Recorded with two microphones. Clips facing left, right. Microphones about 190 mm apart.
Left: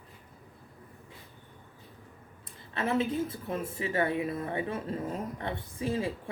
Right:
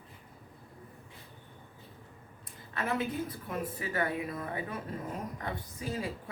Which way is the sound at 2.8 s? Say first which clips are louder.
Left 4 dB; 25° left (ahead or behind).